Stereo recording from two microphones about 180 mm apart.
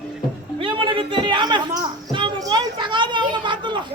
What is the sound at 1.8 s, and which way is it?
Children playing, 25° right (ahead or behind).